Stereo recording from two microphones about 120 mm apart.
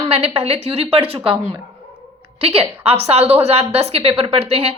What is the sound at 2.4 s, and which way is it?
A woman's voice, 55° right (ahead or behind).